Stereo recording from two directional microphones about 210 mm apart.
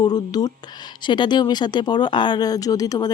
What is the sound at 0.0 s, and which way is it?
Speech, 20° left (ahead or behind).